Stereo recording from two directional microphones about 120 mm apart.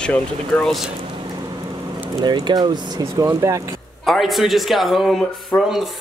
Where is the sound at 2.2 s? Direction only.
35° right (ahead or behind).